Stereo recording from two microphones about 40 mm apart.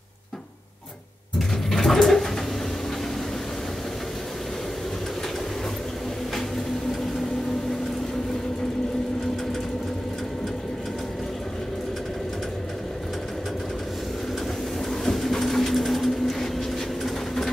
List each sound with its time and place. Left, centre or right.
1.7 s dog: centre
14.9 s sewing machine: centre